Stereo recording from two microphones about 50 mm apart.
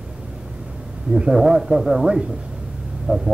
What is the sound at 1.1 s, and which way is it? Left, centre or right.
A man's voice, centre.